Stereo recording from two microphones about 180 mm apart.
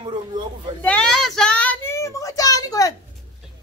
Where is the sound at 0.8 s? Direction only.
5° left (ahead or behind).